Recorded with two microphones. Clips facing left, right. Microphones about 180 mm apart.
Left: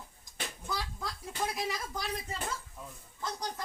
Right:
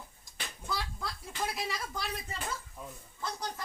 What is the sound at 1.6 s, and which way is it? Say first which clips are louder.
Speech: left 1 dB; 20° left (ahead or behind).